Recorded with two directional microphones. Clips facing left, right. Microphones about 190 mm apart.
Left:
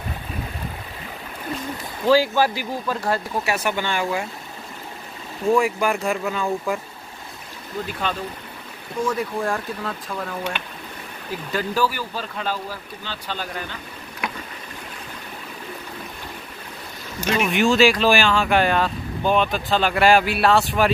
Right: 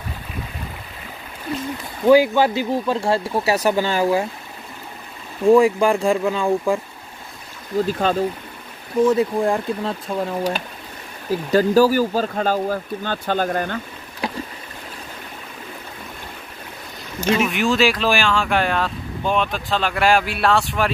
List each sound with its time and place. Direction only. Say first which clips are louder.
2.0 s speech: right 4 dB; 20° right (ahead or behind)
5.6 s speech: right 5 dB; 30° right (ahead or behind)
6.2 s speech: right 5 dB; 15° right (ahead or behind)
7.8 s speech: right 7 dB; 40° right (ahead or behind)
9.0 s speech: right 7 dB; 25° right (ahead or behind); by 13.7 s 50° right (ahead or behind)
14.2 s boat: right 4 dB; 30° right (ahead or behind)
17.5 s speech: left 2 dB; centre (ahead or behind)